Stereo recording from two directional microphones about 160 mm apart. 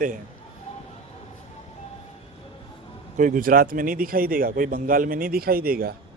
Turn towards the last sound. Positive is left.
turn(degrees=-70)  # may be behind; listen again after turning